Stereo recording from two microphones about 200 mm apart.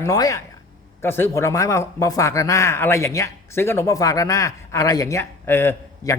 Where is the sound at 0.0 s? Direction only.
15° left (ahead or behind).